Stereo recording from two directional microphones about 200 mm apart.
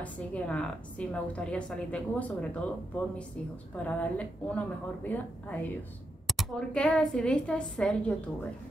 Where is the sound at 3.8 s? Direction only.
5° left (ahead or behind).